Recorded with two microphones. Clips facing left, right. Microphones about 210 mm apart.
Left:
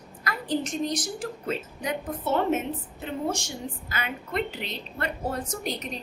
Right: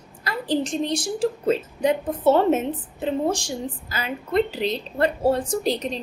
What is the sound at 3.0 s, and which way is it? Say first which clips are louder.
A woman's voice: right 7 dB; 35° right (ahead or behind).